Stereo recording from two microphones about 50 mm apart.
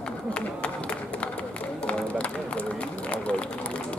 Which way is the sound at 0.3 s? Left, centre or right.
Left.